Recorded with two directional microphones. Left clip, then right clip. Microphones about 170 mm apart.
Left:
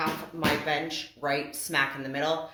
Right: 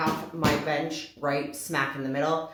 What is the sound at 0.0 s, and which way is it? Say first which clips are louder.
Speech: right 2 dB; 35° left (ahead or behind).